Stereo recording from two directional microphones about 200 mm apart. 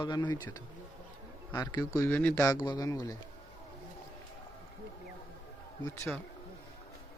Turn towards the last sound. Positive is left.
turn(degrees=15)  # may be behind; listen again after turning